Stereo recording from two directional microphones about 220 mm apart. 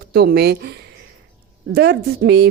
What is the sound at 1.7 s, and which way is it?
Speech, 50° right (ahead or behind).